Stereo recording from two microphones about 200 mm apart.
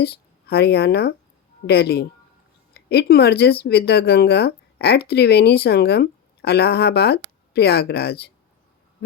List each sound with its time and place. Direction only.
0.0 s speech: 50° left (ahead or behind)